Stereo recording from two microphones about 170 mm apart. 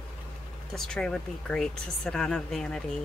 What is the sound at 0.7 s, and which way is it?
Speech, 5° left (ahead or behind).